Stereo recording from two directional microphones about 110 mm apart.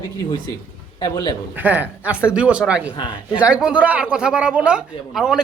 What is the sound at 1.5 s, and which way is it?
A man's voice, 15° right (ahead or behind).